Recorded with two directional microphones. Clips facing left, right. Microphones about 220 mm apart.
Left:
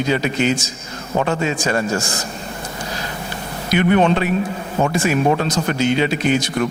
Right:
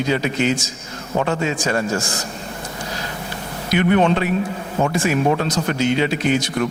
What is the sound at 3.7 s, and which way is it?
A man's voice, 20° left (ahead or behind).